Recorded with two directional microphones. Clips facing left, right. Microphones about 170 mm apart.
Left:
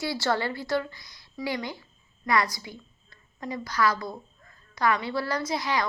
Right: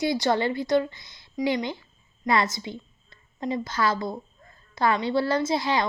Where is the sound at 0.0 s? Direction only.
20° right (ahead or behind).